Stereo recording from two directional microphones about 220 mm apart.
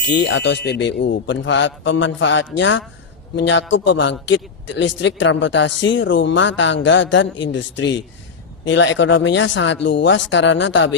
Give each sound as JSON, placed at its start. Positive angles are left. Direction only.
{"t": 0.1, "sound": "a man's voice", "side_deg": 50}